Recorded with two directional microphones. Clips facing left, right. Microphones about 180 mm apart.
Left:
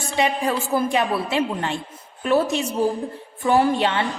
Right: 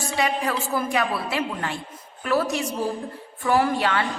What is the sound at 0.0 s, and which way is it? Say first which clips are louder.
A man's voice: left 3 dB; 25° left (ahead or behind).